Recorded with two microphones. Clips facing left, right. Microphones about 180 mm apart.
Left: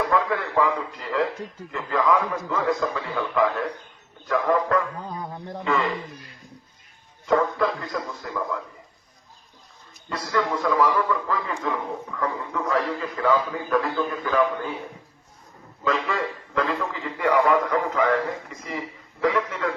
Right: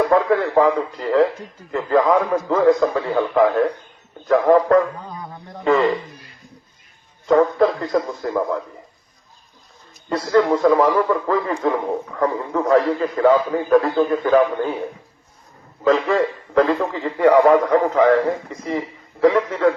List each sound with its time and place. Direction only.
0.1 s a man's voice: 35° right (ahead or behind)
7.3 s a man's voice: 35° right (ahead or behind)
10.1 s a man's voice: 40° right (ahead or behind)
15.8 s a man's voice: 40° right (ahead or behind)